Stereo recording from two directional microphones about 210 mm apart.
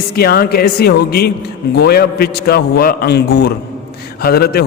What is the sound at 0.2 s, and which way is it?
A man's voice, 45° left (ahead or behind).